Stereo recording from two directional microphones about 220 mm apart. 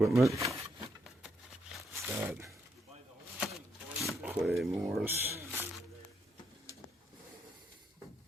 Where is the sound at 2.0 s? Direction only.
10° right (ahead or behind).